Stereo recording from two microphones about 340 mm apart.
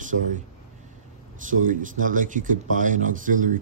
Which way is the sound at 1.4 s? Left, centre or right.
Right.